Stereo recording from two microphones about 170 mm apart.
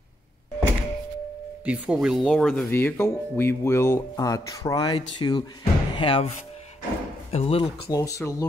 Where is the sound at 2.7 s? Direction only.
15° left (ahead or behind); by 7.6 s 35° left (ahead or behind).